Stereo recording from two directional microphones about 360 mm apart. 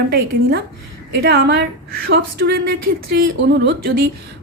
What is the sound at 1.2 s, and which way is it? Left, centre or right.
A woman's voice, right.